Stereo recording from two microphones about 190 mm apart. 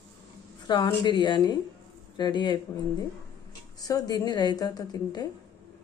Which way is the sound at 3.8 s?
20° left (ahead or behind).